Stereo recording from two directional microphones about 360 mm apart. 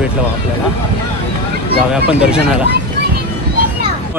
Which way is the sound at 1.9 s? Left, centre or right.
Centre.